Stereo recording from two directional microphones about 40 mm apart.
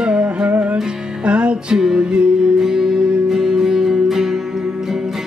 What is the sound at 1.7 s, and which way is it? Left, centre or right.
Music, centre.